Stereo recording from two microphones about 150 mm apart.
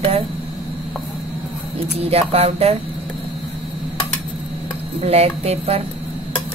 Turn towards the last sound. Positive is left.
turn(degrees=-45)  # may be behind; listen again after turning